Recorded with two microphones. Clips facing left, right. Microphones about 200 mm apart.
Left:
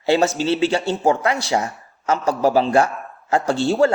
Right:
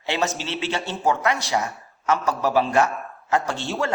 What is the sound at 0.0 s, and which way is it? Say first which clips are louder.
Speech: left 8 dB; 30° left (ahead or behind).